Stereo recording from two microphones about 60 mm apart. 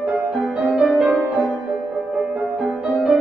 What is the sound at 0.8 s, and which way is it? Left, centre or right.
Music, centre.